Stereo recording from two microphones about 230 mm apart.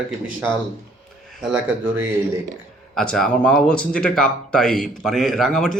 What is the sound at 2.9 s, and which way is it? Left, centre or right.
Speech, centre.